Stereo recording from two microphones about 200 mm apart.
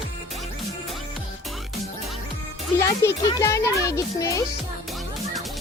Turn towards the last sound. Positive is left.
turn(degrees=15)  # may be behind; listen again after turning